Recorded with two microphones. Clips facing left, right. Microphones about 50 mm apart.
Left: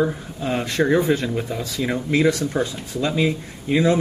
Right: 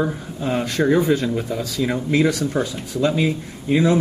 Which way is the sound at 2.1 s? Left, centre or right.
Centre.